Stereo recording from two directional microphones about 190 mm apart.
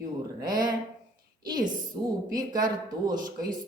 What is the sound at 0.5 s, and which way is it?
Speech, 45° right (ahead or behind).